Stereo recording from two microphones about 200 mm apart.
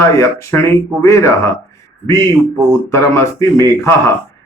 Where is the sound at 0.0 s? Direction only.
15° left (ahead or behind).